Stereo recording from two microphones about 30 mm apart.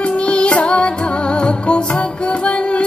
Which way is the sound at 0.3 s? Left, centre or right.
Left.